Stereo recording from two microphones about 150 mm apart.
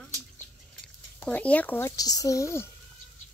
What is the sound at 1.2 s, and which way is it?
Speech, 10° left (ahead or behind).